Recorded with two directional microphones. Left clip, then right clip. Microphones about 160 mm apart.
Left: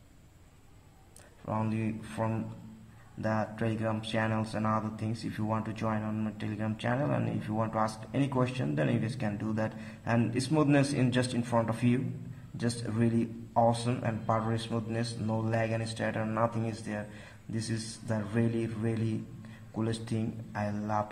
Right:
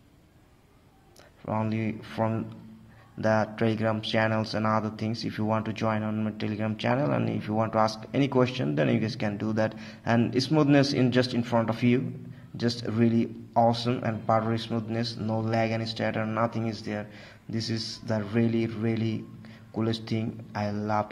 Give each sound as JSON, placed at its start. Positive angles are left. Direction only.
{"t": 1.4, "sound": "speech", "side_deg": -20}